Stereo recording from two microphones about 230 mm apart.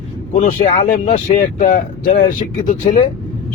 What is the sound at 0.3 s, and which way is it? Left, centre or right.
Speech, left.